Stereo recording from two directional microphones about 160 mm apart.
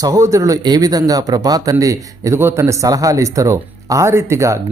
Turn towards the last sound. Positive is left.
turn(degrees=-15)  # may be behind; listen again after turning